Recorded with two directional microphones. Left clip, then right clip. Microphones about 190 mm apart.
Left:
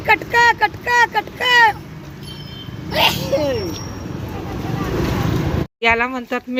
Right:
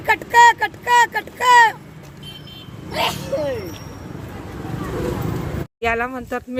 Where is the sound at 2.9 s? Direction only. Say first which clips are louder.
Left 5 dB; 50° left (ahead or behind).